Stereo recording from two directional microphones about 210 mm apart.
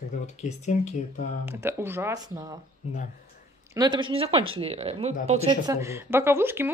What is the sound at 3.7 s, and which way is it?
Speech, 20° right (ahead or behind).